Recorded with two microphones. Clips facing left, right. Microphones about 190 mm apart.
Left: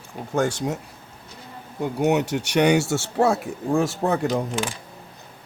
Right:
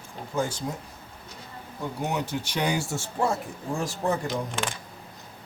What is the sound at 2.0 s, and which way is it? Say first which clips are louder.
Speech: left 9 dB; 75° left (ahead or behind).